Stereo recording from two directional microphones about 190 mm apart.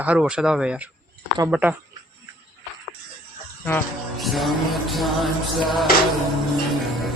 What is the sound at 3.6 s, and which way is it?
A man's voice, 5° left (ahead or behind).